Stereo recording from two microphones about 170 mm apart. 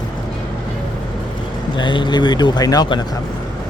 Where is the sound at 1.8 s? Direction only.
25° left (ahead or behind).